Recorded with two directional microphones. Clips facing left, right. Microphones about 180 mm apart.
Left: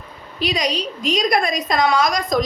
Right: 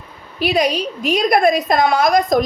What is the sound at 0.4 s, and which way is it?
A woman's voice, 55° right (ahead or behind).